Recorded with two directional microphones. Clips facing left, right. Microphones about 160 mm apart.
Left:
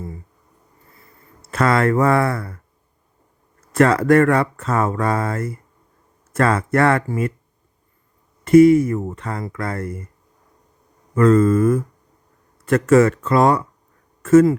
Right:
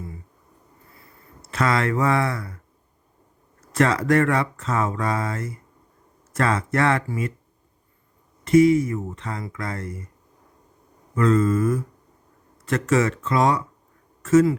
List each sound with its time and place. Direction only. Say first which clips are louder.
1.4 s speech: left 5 dB; 55° left (ahead or behind)
3.7 s speech: left 5 dB; 55° left (ahead or behind)
8.4 s speech: left 5 dB; 55° left (ahead or behind)
11.1 s mantra: left 5 dB; 50° left (ahead or behind)
12.6 s speech: left 7 dB; 55° left (ahead or behind)